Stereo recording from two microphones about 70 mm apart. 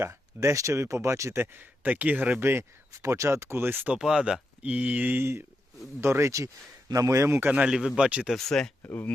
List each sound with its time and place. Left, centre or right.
0.0 s speech: right
1.4 s speech: right
2.4 s speech: right
2.9 s speech: right
3.9 s speech: centre
5.2 s speech: right
7.3 s speech: right
7.6 s speech: centre
8.3 s speech: centre
8.8 s speech: left